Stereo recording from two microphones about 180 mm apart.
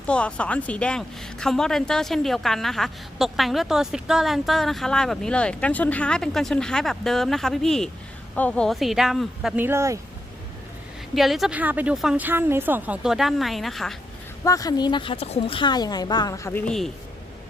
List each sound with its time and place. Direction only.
0.0 s a woman's voice: 5° left (ahead or behind); by 10.0 s 15° right (ahead or behind)
11.1 s a woman's voice: centre (ahead or behind)
14.4 s speech: 20° left (ahead or behind); by 16.9 s 5° left (ahead or behind)